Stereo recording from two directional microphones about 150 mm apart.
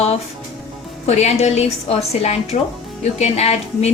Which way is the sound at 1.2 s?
45° left (ahead or behind).